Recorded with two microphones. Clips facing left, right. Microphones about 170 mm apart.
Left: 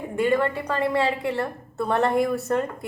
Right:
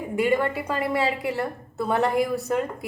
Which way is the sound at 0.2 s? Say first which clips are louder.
Left 1 dB; 10° right (ahead or behind).